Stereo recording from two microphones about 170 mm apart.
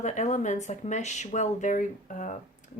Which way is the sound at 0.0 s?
45° left (ahead or behind).